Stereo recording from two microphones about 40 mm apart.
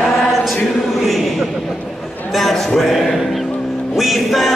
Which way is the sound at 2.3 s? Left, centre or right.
Centre.